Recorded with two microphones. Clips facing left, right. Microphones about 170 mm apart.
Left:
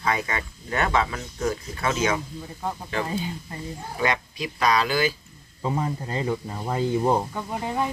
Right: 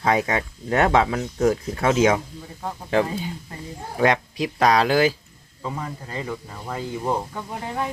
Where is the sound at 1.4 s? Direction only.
50° right (ahead or behind).